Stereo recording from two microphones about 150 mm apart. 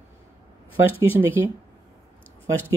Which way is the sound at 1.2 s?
15° right (ahead or behind).